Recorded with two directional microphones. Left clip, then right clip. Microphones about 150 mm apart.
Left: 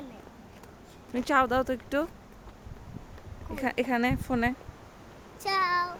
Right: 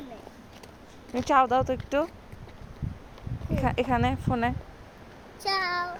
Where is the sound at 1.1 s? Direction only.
15° left (ahead or behind).